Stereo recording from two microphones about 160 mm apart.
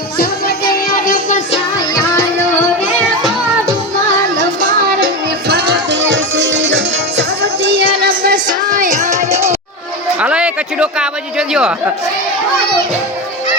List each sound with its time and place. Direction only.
0.2 s music: 70° left (ahead or behind)
5.5 s music: 90° right
8.0 s music: 60° right (ahead or behind)
9.0 s music: 20° right (ahead or behind)
10.2 s a sound: 5° right (ahead or behind)